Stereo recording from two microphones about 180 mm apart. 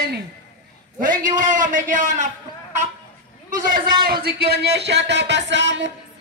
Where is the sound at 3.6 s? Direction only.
55° right (ahead or behind); by 5.9 s 80° right.